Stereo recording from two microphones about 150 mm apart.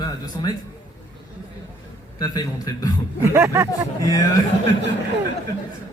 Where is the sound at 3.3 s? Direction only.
20° right (ahead or behind).